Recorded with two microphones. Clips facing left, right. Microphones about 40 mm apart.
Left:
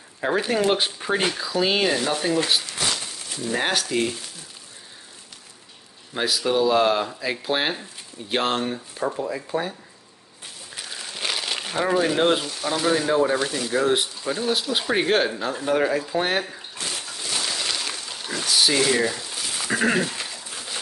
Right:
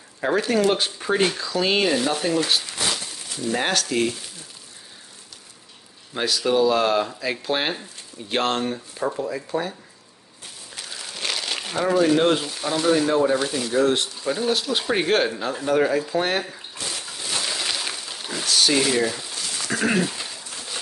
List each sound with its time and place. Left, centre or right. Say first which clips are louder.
0.2 s speech: right 1 dB; centre
6.1 s speech: right 1 dB; centre
10.8 s crumpling: left 1 dB; centre
11.8 s speech: right 2 dB; centre
12.1 s speech: right 2 dB; centre
17.0 s a sound: right 1 dB; centre